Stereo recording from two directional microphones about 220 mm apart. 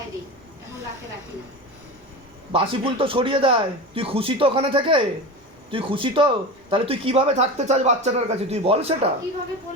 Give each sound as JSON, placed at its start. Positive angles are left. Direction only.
{"t": 2.5, "sound": "speech", "side_deg": -25}